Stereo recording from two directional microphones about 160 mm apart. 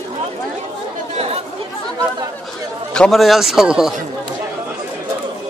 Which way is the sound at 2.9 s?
Centre (ahead or behind).